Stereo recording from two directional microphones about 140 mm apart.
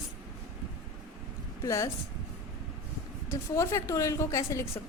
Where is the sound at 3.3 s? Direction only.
20° left (ahead or behind).